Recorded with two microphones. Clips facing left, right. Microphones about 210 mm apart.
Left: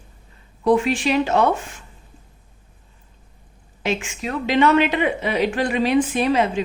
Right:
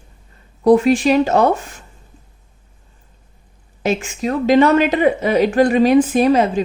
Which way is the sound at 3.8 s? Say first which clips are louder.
Right 5 dB; 40° right (ahead or behind).